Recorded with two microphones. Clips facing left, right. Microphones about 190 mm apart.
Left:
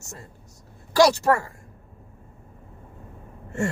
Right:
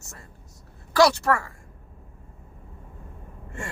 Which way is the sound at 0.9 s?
30° left (ahead or behind).